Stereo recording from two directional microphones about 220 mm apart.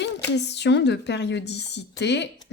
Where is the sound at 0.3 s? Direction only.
50° left (ahead or behind).